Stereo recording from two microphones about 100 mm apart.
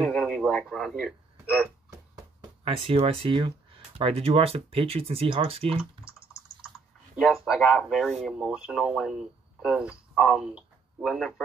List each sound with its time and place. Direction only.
0.0 s a sound: 5° left (ahead or behind)
2.6 s speech: 70° right (ahead or behind)
7.2 s speech: centre (ahead or behind)
8.4 s speech: 10° right (ahead or behind)